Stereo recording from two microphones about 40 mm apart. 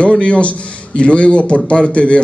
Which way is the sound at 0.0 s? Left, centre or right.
Left.